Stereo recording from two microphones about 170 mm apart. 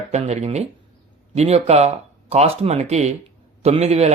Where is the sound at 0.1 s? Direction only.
40° right (ahead or behind).